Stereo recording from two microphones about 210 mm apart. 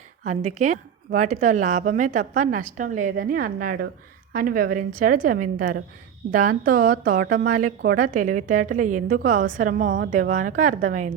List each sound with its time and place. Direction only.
0.3 s a woman's voice: 35° right (ahead or behind)